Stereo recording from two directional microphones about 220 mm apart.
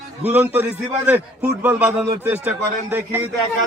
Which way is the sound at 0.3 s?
10° right (ahead or behind).